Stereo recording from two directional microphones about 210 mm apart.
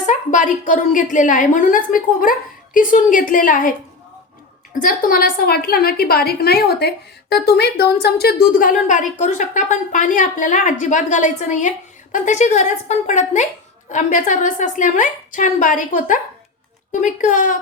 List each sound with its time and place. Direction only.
0.0 s a woman's voice: 35° left (ahead or behind)
4.8 s a woman's voice: 40° left (ahead or behind)